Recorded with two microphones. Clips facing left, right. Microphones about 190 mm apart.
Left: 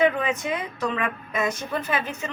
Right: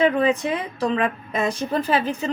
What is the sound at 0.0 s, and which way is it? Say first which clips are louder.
A woman's voice: right 4 dB; 30° right (ahead or behind).